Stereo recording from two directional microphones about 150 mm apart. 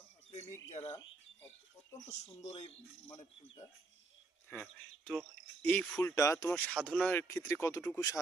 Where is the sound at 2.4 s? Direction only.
45° left (ahead or behind).